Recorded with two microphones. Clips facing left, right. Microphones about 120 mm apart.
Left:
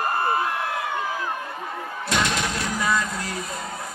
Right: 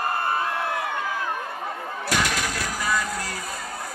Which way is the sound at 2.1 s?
25° left (ahead or behind).